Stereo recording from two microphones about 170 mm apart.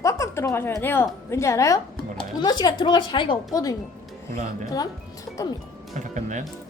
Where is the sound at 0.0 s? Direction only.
20° left (ahead or behind).